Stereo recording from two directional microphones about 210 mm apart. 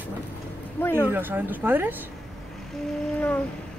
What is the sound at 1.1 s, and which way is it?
Speech, 10° right (ahead or behind).